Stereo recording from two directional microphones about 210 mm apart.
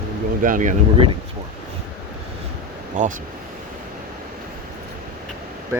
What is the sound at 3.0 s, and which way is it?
Speech, 35° right (ahead or behind).